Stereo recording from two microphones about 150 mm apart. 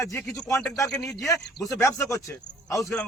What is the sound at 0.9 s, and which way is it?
Speech, 10° left (ahead or behind).